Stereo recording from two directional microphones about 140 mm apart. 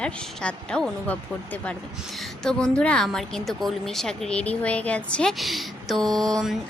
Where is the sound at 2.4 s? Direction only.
5° left (ahead or behind).